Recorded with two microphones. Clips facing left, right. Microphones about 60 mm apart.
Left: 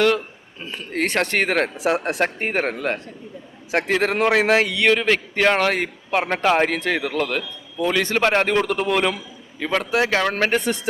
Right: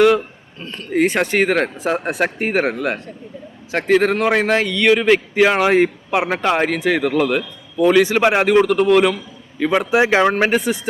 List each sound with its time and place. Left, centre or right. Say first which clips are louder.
0.6 s speech: right 1 dB; centre
0.9 s speech: right 5 dB; centre
4.9 s a man's voice: right 8 dB; centre
5.7 s a man's voice: right 10 dB; right
6.1 s a man's voice: right 1 dB; centre
8.6 s speech: right 7 dB; centre
9.7 s speech: right 5 dB; centre
10.3 s speech: right 3 dB; centre